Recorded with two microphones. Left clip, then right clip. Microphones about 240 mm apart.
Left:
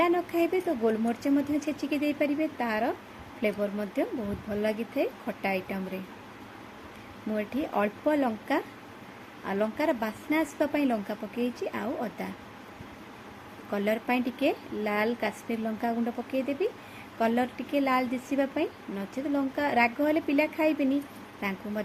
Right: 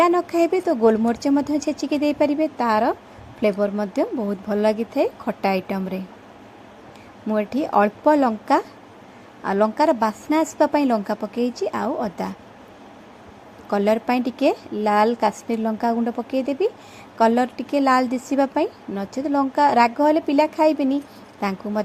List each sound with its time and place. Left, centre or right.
0.0 s a woman's voice: right
7.3 s a woman's voice: right
13.7 s a woman's voice: right